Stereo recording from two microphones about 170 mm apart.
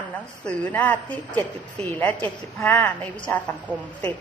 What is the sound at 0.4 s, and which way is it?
A woman's voice, 10° left (ahead or behind).